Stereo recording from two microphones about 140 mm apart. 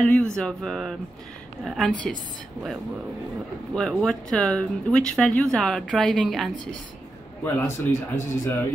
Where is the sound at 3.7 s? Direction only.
5° left (ahead or behind).